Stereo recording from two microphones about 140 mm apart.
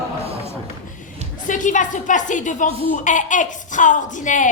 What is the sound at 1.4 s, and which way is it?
A woman's voice, 65° left (ahead or behind).